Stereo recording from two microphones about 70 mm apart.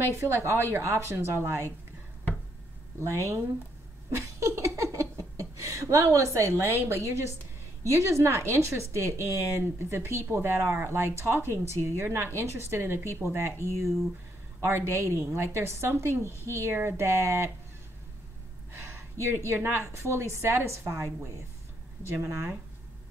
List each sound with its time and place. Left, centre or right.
0.1 s a woman's voice: right
3.0 s speech: right
4.4 s a sound: right
6.1 s a woman's voice: right
18.9 s a woman's voice: right